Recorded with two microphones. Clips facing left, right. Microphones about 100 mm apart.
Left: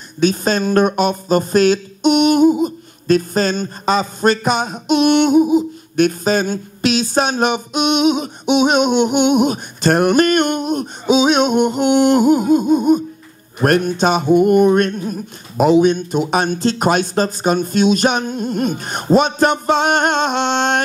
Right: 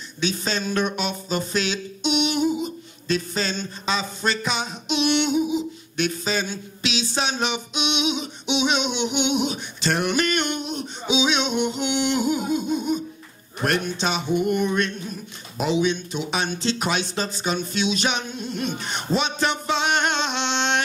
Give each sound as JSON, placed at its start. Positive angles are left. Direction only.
{"t": 0.2, "sound": "speech", "side_deg": 50}